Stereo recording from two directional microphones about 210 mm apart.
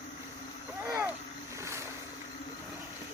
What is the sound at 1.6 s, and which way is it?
Boat, 15° right (ahead or behind).